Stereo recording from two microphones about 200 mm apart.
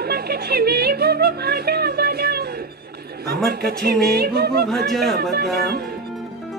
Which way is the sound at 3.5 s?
50° right (ahead or behind).